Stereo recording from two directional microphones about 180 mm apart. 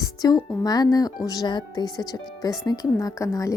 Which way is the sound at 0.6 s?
20° left (ahead or behind).